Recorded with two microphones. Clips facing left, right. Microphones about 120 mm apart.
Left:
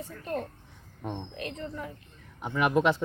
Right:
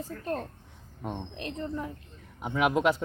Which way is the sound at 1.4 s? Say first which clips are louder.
Right 2 dB; 30° right (ahead or behind).